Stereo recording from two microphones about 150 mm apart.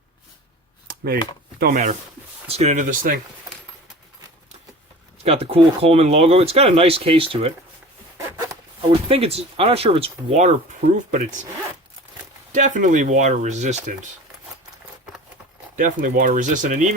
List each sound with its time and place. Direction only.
1.5 s speech: 65° right (ahead or behind)
2.5 s speech: 45° right (ahead or behind)
5.2 s speech: 40° right (ahead or behind)
8.9 s speech: 40° right (ahead or behind); by 11.3 s 55° right (ahead or behind)
12.5 s speech: 55° right (ahead or behind)
15.7 s speech: 60° right (ahead or behind)